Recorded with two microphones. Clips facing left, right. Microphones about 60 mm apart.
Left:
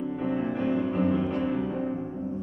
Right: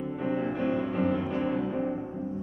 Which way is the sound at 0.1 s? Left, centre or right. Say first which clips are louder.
Right 1 dB; centre.